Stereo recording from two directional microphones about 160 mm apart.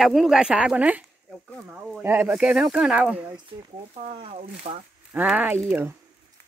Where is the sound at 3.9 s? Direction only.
35° right (ahead or behind).